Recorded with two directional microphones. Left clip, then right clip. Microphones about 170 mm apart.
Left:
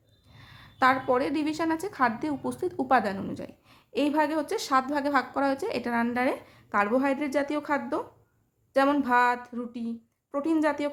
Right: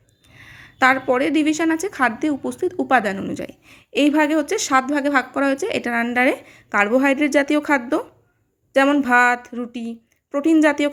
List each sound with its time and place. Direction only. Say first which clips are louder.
0.5 s a woman's voice: right 7 dB; 20° right (ahead or behind)